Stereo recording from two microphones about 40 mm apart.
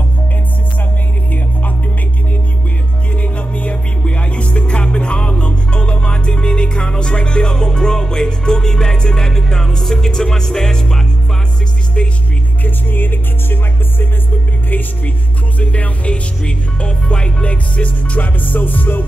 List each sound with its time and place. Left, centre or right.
3.2 s music: left; by 11.0 s centre
12.6 s music: left
15.6 s music: left